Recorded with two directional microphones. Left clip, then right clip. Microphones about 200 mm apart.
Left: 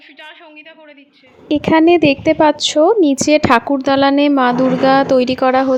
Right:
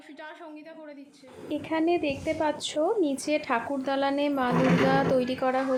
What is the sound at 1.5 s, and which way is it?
A woman's voice, 50° left (ahead or behind).